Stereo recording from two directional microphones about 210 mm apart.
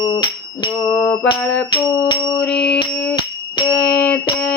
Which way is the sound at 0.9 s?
5° left (ahead or behind).